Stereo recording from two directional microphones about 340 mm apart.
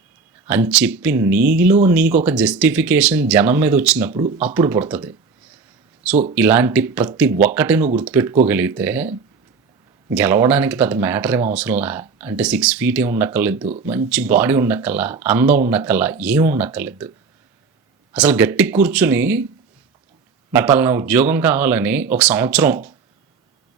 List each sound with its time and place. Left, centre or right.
0.4 s speech: centre
4.1 s speech: centre
4.4 s speech: centre
6.3 s speech: centre
18.1 s speech: centre
20.5 s speech: centre